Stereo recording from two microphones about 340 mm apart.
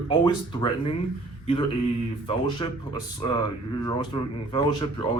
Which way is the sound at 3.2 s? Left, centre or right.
Centre.